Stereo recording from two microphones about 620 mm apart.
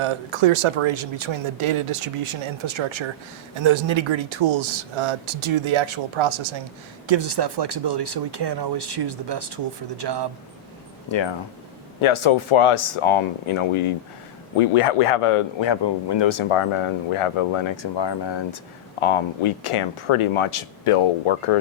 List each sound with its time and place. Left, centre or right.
0.0 s speech: right
11.1 s a man's voice: left